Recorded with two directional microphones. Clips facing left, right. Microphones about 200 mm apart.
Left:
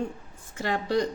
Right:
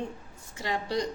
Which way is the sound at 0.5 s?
50° left (ahead or behind).